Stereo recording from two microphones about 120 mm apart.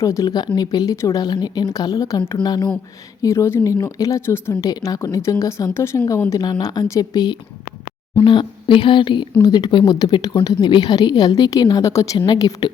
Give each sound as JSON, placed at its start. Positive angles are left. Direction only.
{"t": 0.0, "sound": "speech", "side_deg": 25}
{"t": 2.4, "sound": "speech", "side_deg": 35}
{"t": 3.2, "sound": "a woman's voice", "side_deg": 25}